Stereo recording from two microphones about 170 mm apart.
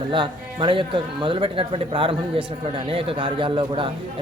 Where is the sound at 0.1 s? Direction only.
30° right (ahead or behind).